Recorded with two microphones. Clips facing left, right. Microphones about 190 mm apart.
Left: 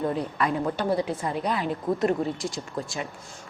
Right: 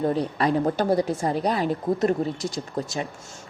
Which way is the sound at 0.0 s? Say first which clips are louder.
Right 3 dB; 35° right (ahead or behind).